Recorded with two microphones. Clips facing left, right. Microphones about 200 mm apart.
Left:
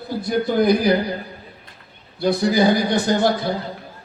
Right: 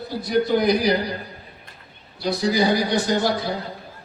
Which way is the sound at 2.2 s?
55° left (ahead or behind).